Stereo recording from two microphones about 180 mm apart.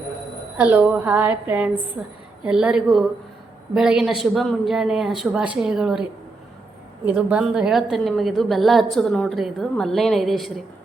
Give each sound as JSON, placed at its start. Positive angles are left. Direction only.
{"t": 0.5, "sound": "a woman's voice", "side_deg": -10}